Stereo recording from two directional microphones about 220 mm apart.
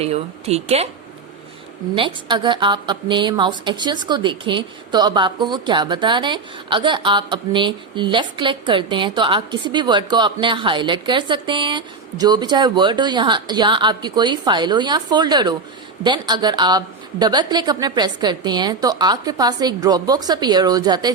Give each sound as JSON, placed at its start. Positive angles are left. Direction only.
{"t": 0.0, "sound": "a woman's voice", "side_deg": -30}
{"t": 2.0, "sound": "a woman's voice", "side_deg": -20}